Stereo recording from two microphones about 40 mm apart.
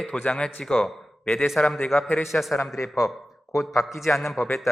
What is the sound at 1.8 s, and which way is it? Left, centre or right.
A man's voice, centre.